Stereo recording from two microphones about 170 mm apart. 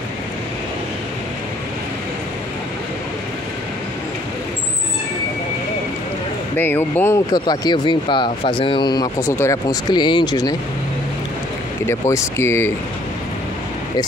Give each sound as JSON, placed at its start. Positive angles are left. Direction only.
{"t": 6.5, "sound": "speech", "side_deg": 10}
{"t": 7.3, "sound": "speech", "side_deg": 25}
{"t": 11.8, "sound": "speech", "side_deg": 15}